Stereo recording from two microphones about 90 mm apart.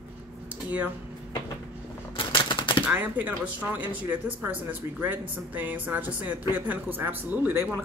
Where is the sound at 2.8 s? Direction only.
20° right (ahead or behind).